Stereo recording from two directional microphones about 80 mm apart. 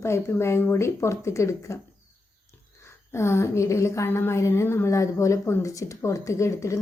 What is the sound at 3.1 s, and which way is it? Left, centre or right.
A woman's voice, left.